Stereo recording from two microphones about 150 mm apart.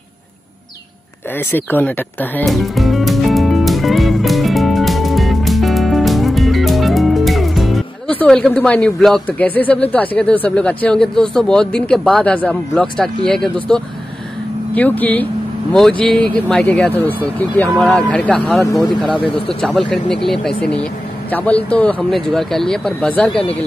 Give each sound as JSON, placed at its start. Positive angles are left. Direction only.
{"t": 1.5, "sound": "speech", "side_deg": 10}
{"t": 2.4, "sound": "music", "side_deg": 0}
{"t": 8.1, "sound": "speech", "side_deg": 10}
{"t": 18.6, "sound": "speech", "side_deg": 25}
{"t": 19.6, "sound": "speech", "side_deg": 5}